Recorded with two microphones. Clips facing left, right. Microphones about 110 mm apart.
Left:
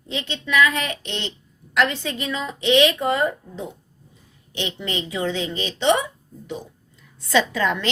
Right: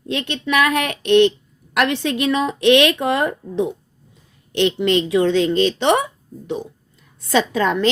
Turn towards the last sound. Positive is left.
turn(degrees=-45)  # may be behind; listen again after turning